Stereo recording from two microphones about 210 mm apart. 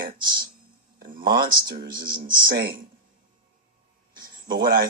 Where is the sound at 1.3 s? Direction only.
45° right (ahead or behind).